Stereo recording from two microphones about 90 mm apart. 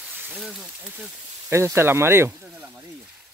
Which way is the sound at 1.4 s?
30° right (ahead or behind).